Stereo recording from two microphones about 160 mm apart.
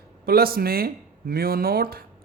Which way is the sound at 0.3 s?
70° right (ahead or behind).